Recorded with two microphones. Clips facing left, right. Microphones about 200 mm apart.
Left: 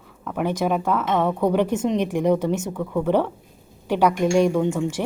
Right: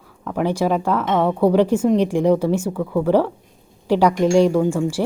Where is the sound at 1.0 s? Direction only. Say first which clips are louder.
Right 4 dB; 10° right (ahead or behind).